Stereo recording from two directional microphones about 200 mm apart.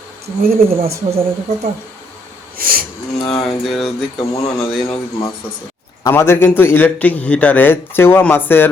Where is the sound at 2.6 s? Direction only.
45° right (ahead or behind).